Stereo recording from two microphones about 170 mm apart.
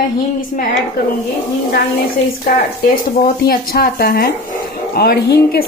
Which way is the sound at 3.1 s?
60° left (ahead or behind).